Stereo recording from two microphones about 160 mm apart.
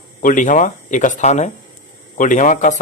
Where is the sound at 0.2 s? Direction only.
55° left (ahead or behind).